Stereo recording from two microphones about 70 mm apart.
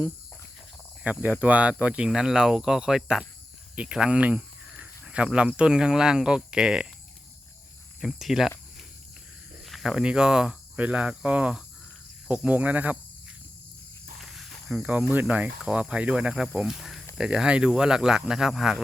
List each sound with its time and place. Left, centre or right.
1.0 s speech: right
8.0 s speech: centre
9.6 s cricket: centre
9.9 s speech: centre
14.2 s cricket: centre
14.8 s speech: right